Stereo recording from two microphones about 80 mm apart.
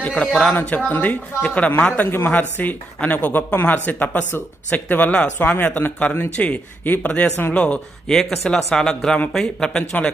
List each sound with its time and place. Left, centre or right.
0.5 s speech: centre